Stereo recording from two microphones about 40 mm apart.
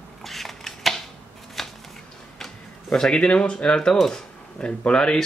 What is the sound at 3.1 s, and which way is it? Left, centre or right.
Speech, left.